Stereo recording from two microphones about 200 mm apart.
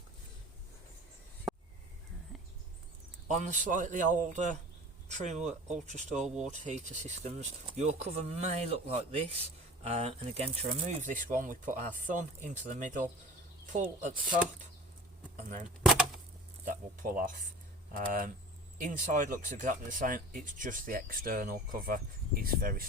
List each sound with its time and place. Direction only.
3.2 s speech: 35° right (ahead or behind)
15.8 s a sound: 5° right (ahead or behind)
16.6 s speech: 45° right (ahead or behind)